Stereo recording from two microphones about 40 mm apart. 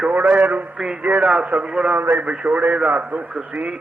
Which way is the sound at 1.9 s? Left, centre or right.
Right.